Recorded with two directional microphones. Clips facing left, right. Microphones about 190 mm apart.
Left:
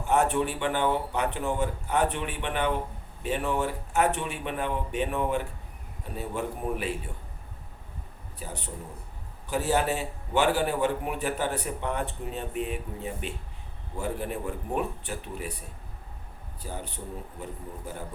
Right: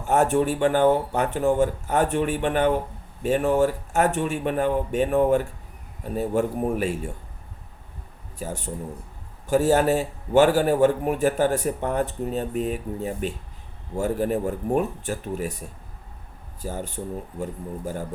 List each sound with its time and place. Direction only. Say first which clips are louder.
0.1 s a man's voice: right 5 dB; 45° right (ahead or behind)
8.4 s a man's voice: right 7 dB; 45° right (ahead or behind)
16.6 s a man's voice: right 7 dB; 45° right (ahead or behind)